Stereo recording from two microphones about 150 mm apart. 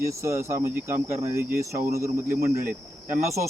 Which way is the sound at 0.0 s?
20° right (ahead or behind).